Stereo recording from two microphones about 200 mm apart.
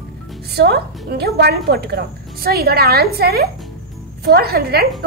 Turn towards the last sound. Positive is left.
turn(degrees=-50)  # may be behind; listen again after turning